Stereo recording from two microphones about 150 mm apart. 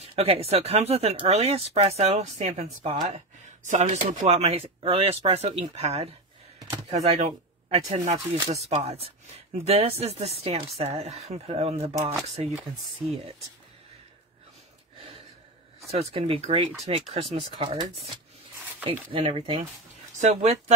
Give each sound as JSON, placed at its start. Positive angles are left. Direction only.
{"t": 0.0, "sound": "speech", "side_deg": -40}
{"t": 3.6, "sound": "speech", "side_deg": -55}
{"t": 13.0, "sound": "speech", "side_deg": -45}
{"t": 15.9, "sound": "speech", "side_deg": -40}
{"t": 19.1, "sound": "speech", "side_deg": -35}
{"t": 20.2, "sound": "speech", "side_deg": -50}